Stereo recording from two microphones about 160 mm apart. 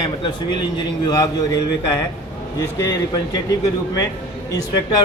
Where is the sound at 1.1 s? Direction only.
25° left (ahead or behind).